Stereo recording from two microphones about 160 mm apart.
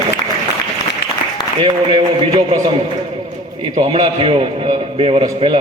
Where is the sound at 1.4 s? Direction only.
25° left (ahead or behind).